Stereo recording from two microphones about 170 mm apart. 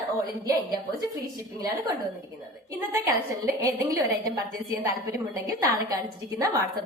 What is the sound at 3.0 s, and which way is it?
A woman's voice, 15° right (ahead or behind).